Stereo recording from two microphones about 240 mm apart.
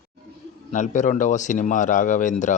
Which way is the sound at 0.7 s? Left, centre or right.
Left.